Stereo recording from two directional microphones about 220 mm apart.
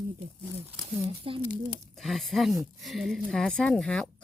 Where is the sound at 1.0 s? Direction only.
25° right (ahead or behind).